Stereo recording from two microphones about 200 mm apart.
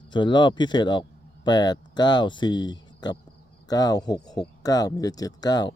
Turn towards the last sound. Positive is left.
turn(degrees=20)  # may be behind; listen again after turning